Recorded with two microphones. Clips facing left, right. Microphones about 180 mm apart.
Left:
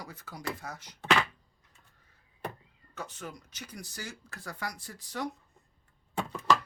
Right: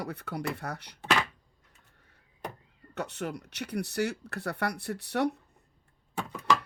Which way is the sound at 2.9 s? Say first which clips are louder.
Right 7 dB; 70° right (ahead or behind).